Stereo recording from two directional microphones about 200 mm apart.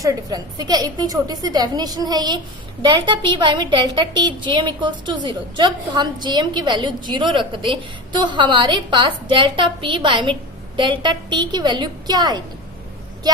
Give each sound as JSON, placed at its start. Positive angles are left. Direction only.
{"t": 0.0, "sound": "a woman's voice", "side_deg": -20}